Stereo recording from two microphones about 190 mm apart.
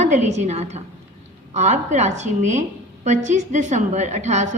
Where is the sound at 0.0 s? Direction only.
35° right (ahead or behind).